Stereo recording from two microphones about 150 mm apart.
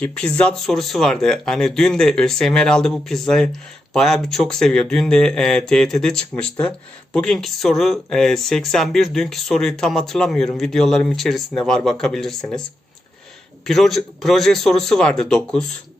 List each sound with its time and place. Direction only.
0.0 s speech: 5° left (ahead or behind)
13.7 s speech: centre (ahead or behind)